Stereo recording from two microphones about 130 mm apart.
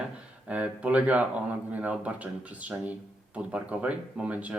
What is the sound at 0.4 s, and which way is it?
Speech, 10° right (ahead or behind).